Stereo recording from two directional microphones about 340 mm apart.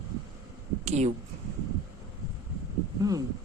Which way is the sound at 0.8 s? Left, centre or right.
Centre.